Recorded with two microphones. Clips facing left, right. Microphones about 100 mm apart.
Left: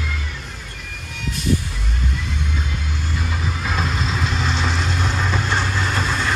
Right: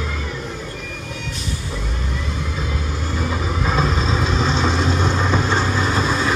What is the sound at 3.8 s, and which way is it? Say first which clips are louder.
Vehicle: right 3 dB; 35° right (ahead or behind).